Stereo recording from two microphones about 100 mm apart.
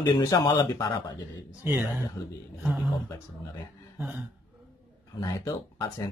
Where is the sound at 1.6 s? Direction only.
20° right (ahead or behind).